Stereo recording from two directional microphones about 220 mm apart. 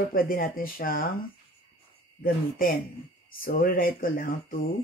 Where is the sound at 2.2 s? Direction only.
40° left (ahead or behind).